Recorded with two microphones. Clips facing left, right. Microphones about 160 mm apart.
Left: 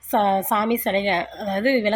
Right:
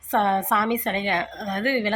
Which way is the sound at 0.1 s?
20° left (ahead or behind).